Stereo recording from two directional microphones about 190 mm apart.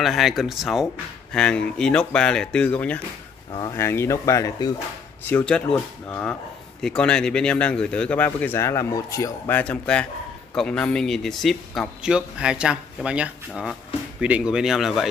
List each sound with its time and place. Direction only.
0.0 s speech: centre (ahead or behind)
3.5 s speech: 15° left (ahead or behind)
5.2 s speech: 5° left (ahead or behind)